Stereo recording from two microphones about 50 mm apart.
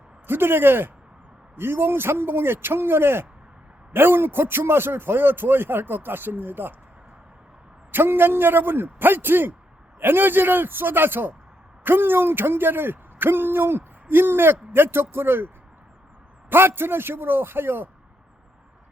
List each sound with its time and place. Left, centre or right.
0.3 s a man's voice: right
7.9 s a man's voice: right
16.5 s a man's voice: right